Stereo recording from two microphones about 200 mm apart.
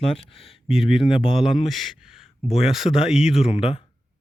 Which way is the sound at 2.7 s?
Centre (ahead or behind).